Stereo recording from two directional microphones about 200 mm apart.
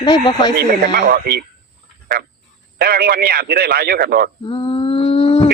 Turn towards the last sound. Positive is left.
turn(degrees=30)  # may be behind; listen again after turning